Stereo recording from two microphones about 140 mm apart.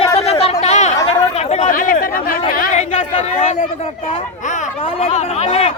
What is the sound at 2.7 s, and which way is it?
Speech, 60° left (ahead or behind).